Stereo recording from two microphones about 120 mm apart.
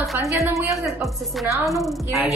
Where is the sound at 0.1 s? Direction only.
25° right (ahead or behind).